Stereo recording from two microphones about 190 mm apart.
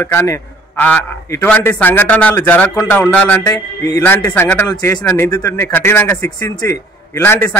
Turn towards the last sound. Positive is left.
turn(degrees=10)  # may be behind; listen again after turning